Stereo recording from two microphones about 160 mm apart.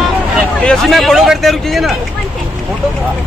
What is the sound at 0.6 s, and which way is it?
Speech, centre (ahead or behind).